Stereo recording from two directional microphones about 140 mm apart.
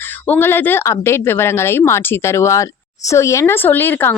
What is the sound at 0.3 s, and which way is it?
Speech, 15° left (ahead or behind).